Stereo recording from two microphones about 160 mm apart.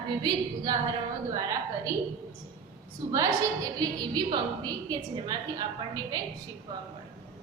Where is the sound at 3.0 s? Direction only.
20° right (ahead or behind).